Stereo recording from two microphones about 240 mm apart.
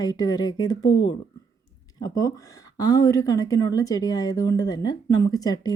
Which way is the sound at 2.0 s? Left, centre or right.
Centre.